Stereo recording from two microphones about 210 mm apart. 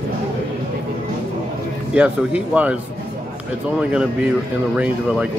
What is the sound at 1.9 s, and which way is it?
Speech, 5° right (ahead or behind).